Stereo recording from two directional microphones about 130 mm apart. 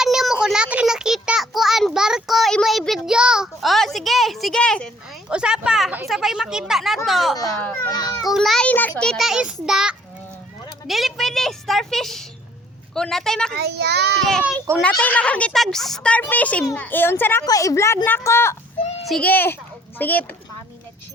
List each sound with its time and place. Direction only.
0.0 s a sound: centre (ahead or behind)
5.3 s a child's voice: 5° right (ahead or behind); by 7.9 s 10° left (ahead or behind)
7.9 s a child's voice: 30° left (ahead or behind)
8.3 s a child's voice: centre (ahead or behind)
14.8 s a woman's voice: 10° left (ahead or behind)
17.4 s a woman's voice: 25° left (ahead or behind)
19.0 s a child's voice: 5° left (ahead or behind)
19.3 s a woman's voice: 15° left (ahead or behind)